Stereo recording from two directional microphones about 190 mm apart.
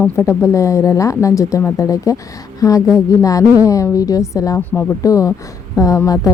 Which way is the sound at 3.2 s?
15° left (ahead or behind).